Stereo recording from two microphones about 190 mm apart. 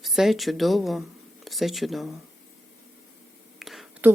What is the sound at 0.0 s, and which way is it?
Speech, centre (ahead or behind).